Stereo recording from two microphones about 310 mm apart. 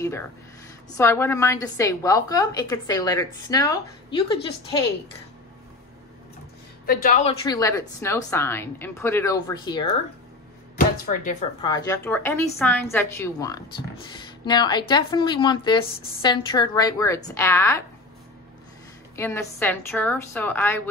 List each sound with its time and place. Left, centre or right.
0.8 s a woman's voice: centre
6.9 s speech: left
7.4 s a woman's voice: centre
10.8 s speech: left
11.6 s a woman's voice: centre
19.1 s a woman's voice: centre